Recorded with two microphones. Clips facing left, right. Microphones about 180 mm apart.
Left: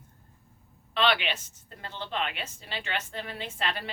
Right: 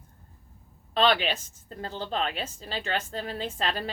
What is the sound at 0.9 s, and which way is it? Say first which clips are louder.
A woman's voice: right 3 dB; 40° right (ahead or behind).